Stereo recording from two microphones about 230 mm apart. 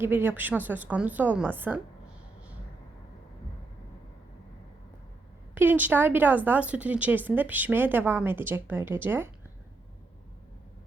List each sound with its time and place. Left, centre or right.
0.0 s speech: centre
5.5 s speech: centre